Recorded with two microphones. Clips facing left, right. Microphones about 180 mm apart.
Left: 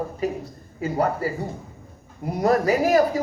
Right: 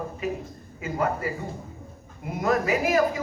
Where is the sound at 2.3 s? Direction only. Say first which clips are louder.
Left 4 dB; 35° left (ahead or behind).